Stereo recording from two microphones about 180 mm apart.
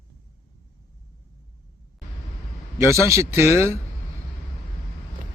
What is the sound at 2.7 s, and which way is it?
Speech, 15° right (ahead or behind).